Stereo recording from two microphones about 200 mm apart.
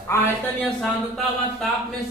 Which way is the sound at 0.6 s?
Centre (ahead or behind).